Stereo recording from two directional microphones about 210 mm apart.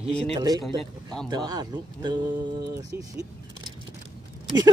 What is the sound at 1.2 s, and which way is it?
Speech, 20° right (ahead or behind).